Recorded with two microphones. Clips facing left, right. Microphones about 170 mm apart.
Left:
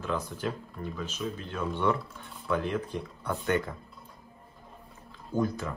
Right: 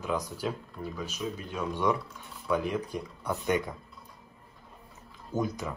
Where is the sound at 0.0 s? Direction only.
10° right (ahead or behind).